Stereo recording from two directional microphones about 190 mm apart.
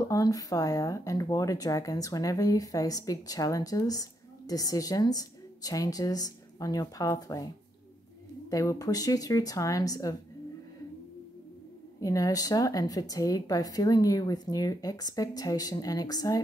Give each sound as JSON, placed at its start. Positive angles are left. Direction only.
{"t": 0.1, "sound": "speech", "side_deg": 20}
{"t": 8.5, "sound": "speech", "side_deg": 15}
{"t": 12.0, "sound": "speech", "side_deg": 20}